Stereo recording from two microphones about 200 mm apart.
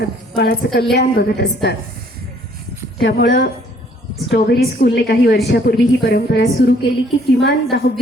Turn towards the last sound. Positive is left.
turn(degrees=55)  # may be behind; listen again after turning